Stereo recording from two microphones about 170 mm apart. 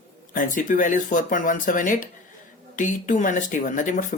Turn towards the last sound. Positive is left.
turn(degrees=50)  # may be behind; listen again after turning